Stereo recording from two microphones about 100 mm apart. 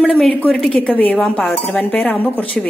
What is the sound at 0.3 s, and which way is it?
Dishes, 15° left (ahead or behind).